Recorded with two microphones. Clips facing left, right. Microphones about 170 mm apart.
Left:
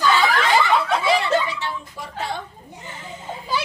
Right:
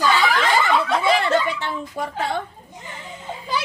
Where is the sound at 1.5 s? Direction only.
55° right (ahead or behind).